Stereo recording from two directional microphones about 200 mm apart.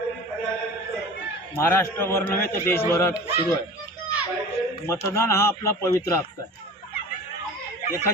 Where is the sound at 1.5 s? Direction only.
10° left (ahead or behind).